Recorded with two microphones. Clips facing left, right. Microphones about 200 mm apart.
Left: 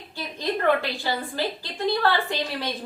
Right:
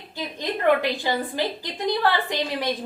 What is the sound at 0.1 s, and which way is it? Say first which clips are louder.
A woman's voice: left 1 dB; 15° right (ahead or behind).